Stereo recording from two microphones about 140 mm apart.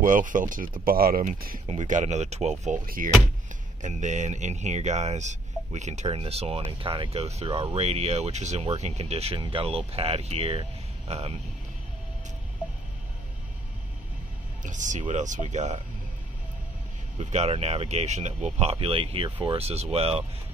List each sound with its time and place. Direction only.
0.0 s speech: 70° right (ahead or behind)
1.7 s speech: 60° right (ahead or behind)
3.8 s speech: 60° right (ahead or behind)
14.6 s speech: 65° right (ahead or behind)
17.2 s speech: 50° right (ahead or behind)